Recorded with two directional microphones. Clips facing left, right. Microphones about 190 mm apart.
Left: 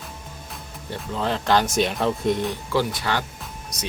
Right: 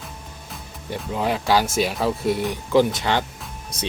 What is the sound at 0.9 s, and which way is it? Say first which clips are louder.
Speech: right 2 dB; 10° right (ahead or behind).